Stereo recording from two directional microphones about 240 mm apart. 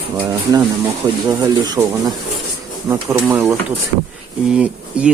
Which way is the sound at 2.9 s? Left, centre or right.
Centre.